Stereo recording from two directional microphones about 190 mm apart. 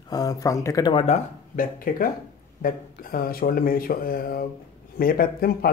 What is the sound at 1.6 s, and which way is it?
Speech, 45° left (ahead or behind).